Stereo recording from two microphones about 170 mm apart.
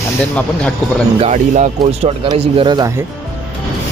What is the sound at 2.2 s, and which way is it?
Speech, 30° right (ahead or behind).